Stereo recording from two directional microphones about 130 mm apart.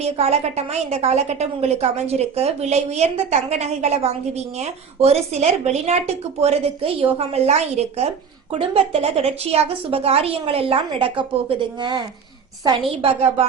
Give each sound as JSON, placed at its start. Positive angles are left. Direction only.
{"t": 0.0, "sound": "a woman's voice", "side_deg": -55}